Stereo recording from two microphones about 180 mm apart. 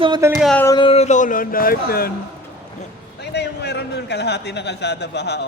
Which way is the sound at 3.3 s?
70° left (ahead or behind).